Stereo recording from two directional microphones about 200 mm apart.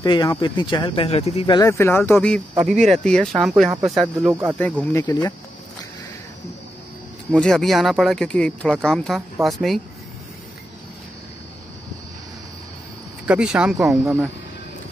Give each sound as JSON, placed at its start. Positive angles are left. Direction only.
{"t": 0.0, "sound": "speech", "side_deg": 20}
{"t": 4.3, "sound": "speech", "side_deg": -10}
{"t": 4.9, "sound": "speech", "side_deg": 20}
{"t": 7.2, "sound": "speech", "side_deg": 5}
{"t": 13.3, "sound": "speech", "side_deg": -5}